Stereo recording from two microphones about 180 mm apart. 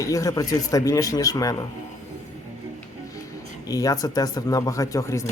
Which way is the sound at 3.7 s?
20° left (ahead or behind).